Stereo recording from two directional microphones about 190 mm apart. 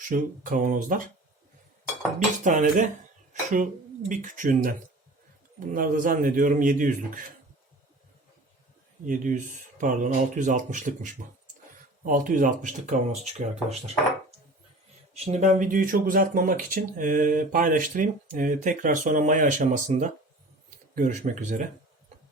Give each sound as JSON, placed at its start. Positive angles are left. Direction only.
{"t": 0.0, "sound": "speech", "side_deg": -45}
{"t": 2.1, "sound": "speech", "side_deg": -40}
{"t": 4.1, "sound": "speech", "side_deg": -45}
{"t": 9.0, "sound": "speech", "side_deg": -40}